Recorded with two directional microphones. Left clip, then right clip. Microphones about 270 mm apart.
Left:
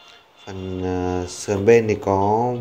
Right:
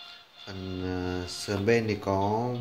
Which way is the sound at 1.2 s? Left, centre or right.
Centre.